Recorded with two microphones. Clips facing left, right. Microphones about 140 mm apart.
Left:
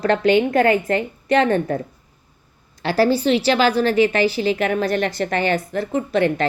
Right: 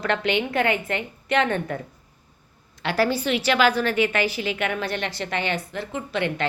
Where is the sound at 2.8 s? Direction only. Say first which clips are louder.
Left 5 dB; 35° left (ahead or behind).